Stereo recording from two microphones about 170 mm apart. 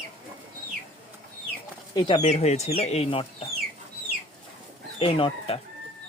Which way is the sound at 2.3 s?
40° left (ahead or behind).